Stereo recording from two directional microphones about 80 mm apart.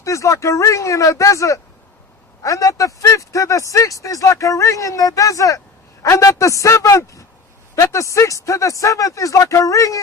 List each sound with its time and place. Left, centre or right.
0.0 s speech: left